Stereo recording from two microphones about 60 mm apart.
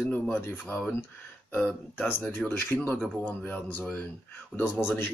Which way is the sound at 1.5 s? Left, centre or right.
Left.